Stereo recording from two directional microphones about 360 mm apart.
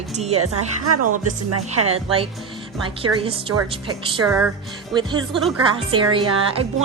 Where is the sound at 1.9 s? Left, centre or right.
Centre.